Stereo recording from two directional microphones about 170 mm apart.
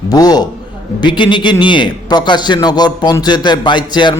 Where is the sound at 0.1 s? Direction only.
25° left (ahead or behind).